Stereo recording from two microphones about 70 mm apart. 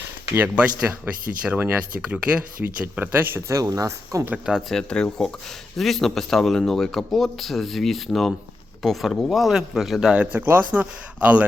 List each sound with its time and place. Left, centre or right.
0.3 s speech: right
3.5 s speech: right
4.7 s speech: centre
10.2 s speech: right